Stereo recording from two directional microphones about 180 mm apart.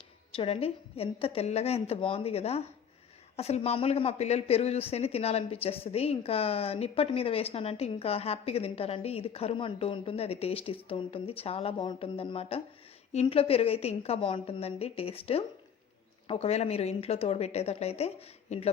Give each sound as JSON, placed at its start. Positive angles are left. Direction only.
{"t": 0.3, "sound": "speech", "side_deg": 30}